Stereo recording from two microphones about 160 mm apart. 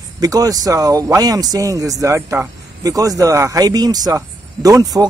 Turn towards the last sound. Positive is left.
turn(degrees=-20)  # may be behind; listen again after turning